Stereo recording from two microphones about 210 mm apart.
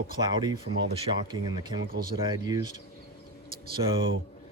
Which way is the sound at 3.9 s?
65° right (ahead or behind).